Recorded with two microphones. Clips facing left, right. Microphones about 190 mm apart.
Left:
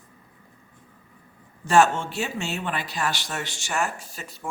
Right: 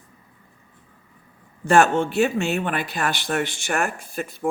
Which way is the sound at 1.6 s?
55° right (ahead or behind).